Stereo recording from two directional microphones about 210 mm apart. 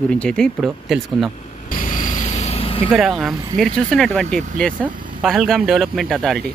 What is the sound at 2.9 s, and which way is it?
Speech, 5° right (ahead or behind).